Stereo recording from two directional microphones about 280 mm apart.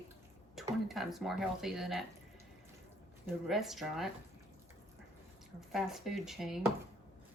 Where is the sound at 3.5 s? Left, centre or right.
Centre.